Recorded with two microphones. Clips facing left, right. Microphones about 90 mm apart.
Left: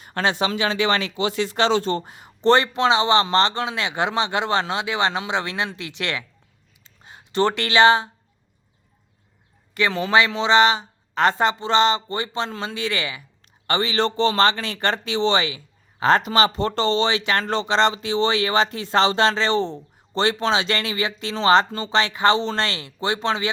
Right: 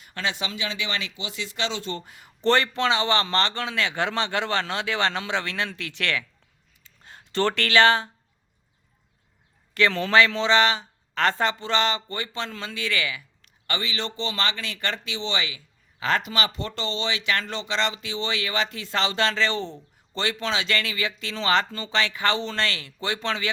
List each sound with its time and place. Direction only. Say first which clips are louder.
0.0 s speech: left 8 dB; 40° left (ahead or behind); by 6.2 s 20° left (ahead or behind)
6.8 s a sound: left 2 dB; 15° left (ahead or behind)
9.7 s speech: left 1 dB; 10° left (ahead or behind)
13.7 s speech: left 8 dB; 35° left (ahead or behind)